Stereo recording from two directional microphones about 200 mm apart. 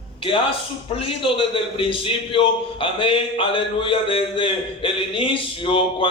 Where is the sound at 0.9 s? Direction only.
25° left (ahead or behind).